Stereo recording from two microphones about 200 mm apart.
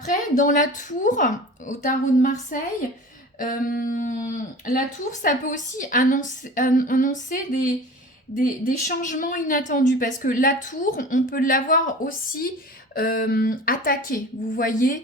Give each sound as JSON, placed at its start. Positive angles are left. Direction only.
{"t": 0.1, "sound": "a woman's voice", "side_deg": 40}
{"t": 5.2, "sound": "a woman's voice", "side_deg": 40}